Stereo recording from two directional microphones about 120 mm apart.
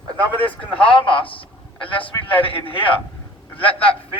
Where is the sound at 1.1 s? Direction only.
45° left (ahead or behind).